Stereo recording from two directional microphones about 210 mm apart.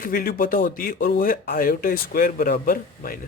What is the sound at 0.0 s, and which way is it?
Speech, 45° left (ahead or behind).